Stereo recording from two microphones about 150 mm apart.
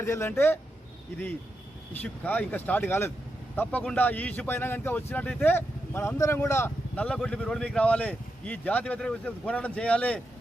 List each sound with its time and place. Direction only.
0.0 s speech: 15° left (ahead or behind)
1.9 s speech: 10° left (ahead or behind)